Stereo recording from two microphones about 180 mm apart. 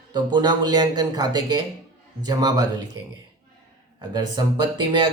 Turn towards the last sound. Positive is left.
turn(degrees=-25)  # may be behind; listen again after turning